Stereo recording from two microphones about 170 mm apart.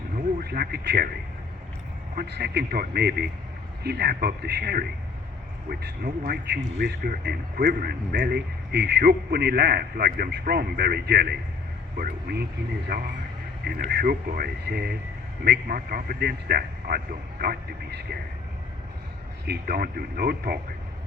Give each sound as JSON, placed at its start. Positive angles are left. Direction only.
{"t": 0.4, "sound": "speech", "side_deg": -65}
{"t": 2.1, "sound": "speech", "side_deg": -75}
{"t": 12.9, "sound": "a man's voice", "side_deg": -60}
{"t": 15.4, "sound": "a man's voice", "side_deg": -60}
{"t": 19.5, "sound": "a man's voice", "side_deg": -65}